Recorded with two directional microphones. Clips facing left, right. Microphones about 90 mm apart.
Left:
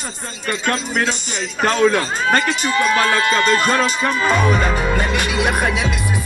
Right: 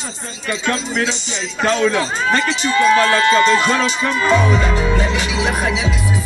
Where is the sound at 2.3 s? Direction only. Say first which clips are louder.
Left 1 dB; 50° left (ahead or behind).